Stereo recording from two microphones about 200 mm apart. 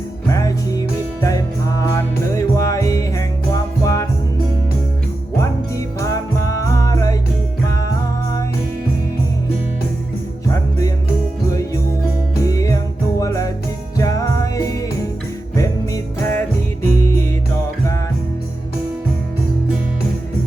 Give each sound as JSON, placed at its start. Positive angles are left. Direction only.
{"t": 0.3, "sound": "music", "side_deg": 15}
{"t": 5.4, "sound": "music", "side_deg": 15}
{"t": 10.5, "sound": "music", "side_deg": 15}
{"t": 12.5, "sound": "music", "side_deg": 15}